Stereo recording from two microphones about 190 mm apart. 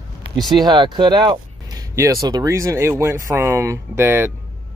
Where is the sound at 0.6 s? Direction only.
25° right (ahead or behind).